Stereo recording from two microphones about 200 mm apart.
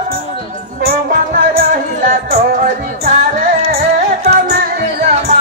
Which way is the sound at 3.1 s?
50° right (ahead or behind).